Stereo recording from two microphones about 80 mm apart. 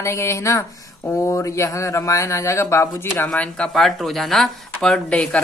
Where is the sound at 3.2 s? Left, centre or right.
Centre.